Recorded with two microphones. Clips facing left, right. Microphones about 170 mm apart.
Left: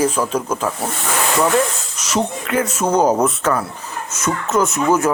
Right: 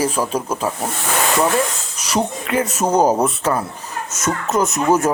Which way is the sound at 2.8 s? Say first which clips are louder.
Even; 15° right (ahead or behind).